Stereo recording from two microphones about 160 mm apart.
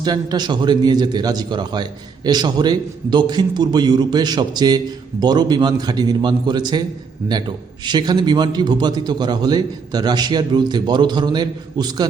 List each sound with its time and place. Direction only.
0.0 s a man's voice: 25° right (ahead or behind)
7.9 s a man's voice: 25° right (ahead or behind)